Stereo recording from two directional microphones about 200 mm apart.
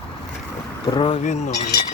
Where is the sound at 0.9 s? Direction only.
25° left (ahead or behind).